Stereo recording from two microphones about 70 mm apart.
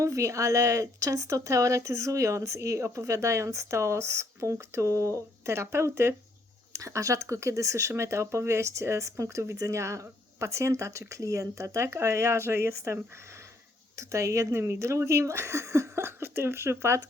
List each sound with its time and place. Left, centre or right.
0.0 s speech: right